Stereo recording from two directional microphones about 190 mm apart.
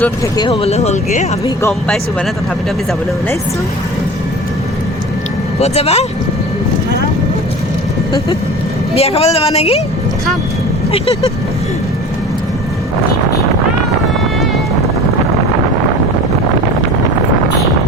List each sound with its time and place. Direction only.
0.3 s speech: 30° left (ahead or behind)
5.5 s speech: 35° left (ahead or behind)
9.0 s speech: 30° left (ahead or behind)
10.9 s speech: 30° left (ahead or behind)